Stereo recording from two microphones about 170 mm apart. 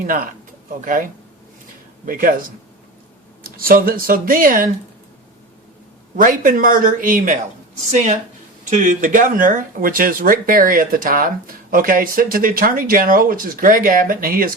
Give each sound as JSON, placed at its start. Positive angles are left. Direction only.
{"t": 0.0, "sound": "speech", "side_deg": -50}
{"t": 2.0, "sound": "speech", "side_deg": -55}
{"t": 3.4, "sound": "speech", "side_deg": -60}
{"t": 6.1, "sound": "speech", "side_deg": -50}